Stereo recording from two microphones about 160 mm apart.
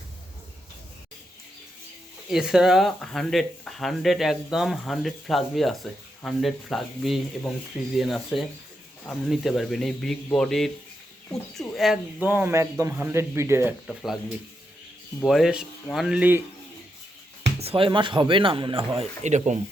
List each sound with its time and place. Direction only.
2.3 s speech: 5° right (ahead or behind)
11.7 s speech: centre (ahead or behind)
12.2 s speech: 10° right (ahead or behind)
13.8 s speech: centre (ahead or behind)
15.2 s speech: centre (ahead or behind)
17.6 s speech: 35° right (ahead or behind)